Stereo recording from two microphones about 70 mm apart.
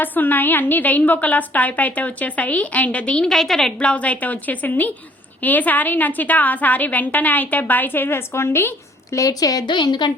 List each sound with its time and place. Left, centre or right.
0.0 s a woman's voice: left
3.2 s a woman's voice: centre
3.8 s a woman's voice: centre; by 8.7 s left
9.1 s a woman's voice: left